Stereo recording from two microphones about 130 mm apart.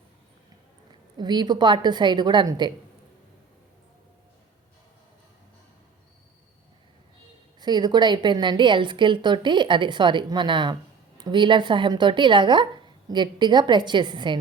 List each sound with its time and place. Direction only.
1.2 s speech: 35° right (ahead or behind)
7.6 s speech: 35° right (ahead or behind)